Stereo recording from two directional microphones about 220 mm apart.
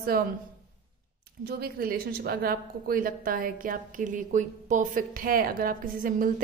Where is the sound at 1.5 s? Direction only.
45° right (ahead or behind).